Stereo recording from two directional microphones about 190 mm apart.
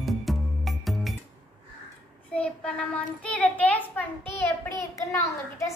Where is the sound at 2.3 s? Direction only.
5° left (ahead or behind).